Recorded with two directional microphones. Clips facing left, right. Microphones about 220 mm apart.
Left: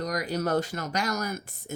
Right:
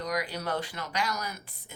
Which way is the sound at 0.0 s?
45° left (ahead or behind).